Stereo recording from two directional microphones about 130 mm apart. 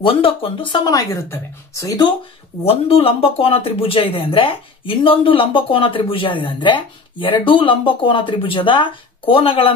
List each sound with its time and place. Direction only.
0.0 s speech: 45° left (ahead or behind)
0.9 s speech: 20° left (ahead or behind)
2.6 s speech: 50° left (ahead or behind)